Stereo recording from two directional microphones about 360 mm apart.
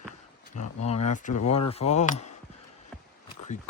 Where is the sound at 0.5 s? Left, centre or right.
Centre.